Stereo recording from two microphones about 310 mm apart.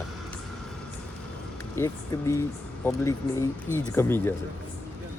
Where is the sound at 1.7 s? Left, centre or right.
Centre.